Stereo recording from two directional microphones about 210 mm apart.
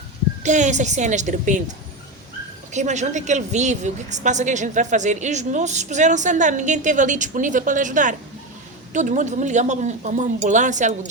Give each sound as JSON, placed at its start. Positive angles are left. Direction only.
{"t": 0.4, "sound": "a woman's voice", "side_deg": -35}
{"t": 2.7, "sound": "a woman's voice", "side_deg": -35}